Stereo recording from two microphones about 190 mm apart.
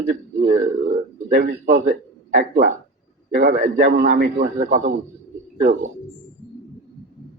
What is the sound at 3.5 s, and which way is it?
Speech, 65° right (ahead or behind).